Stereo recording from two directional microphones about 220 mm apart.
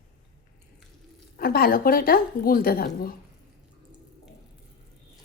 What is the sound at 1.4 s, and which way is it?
A woman's voice, 45° left (ahead or behind).